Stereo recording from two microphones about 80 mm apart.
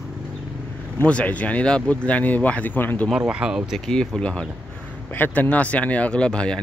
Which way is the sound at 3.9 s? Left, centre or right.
Centre.